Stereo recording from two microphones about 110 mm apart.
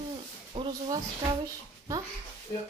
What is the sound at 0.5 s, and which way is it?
Speech, 90° right.